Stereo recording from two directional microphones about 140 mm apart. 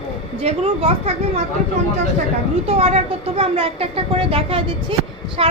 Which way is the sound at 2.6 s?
50° right (ahead or behind).